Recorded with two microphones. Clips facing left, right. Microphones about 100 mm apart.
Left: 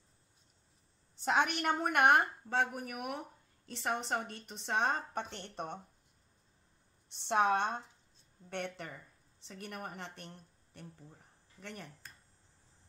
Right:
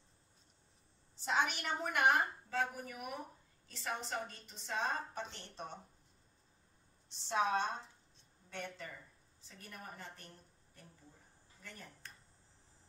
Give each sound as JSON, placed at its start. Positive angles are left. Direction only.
{"t": 1.1, "sound": "a woman's voice", "side_deg": 60}
{"t": 7.1, "sound": "a woman's voice", "side_deg": 60}